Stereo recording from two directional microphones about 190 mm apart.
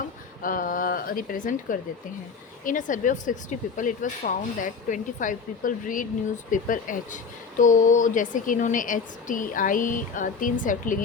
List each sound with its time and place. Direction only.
0.4 s speech: 45° left (ahead or behind)